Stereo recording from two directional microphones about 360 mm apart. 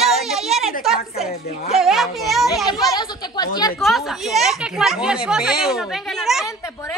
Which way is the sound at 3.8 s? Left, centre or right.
Centre.